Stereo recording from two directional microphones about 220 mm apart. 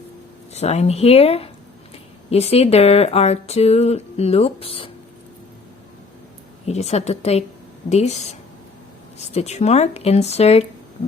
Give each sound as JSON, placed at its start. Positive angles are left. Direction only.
{"t": 0.5, "sound": "speech", "side_deg": 30}
{"t": 6.7, "sound": "speech", "side_deg": 30}